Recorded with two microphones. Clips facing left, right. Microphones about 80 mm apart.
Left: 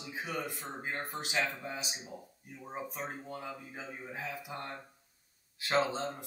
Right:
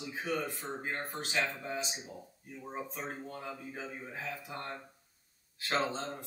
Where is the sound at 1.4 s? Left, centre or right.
Centre.